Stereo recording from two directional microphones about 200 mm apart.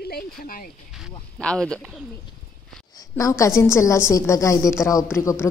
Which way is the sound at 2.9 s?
15° left (ahead or behind).